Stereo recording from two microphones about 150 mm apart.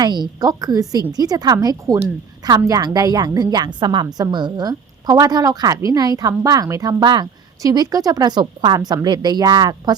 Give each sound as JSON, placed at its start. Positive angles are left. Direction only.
{"t": 0.0, "sound": "a woman's voice", "side_deg": -30}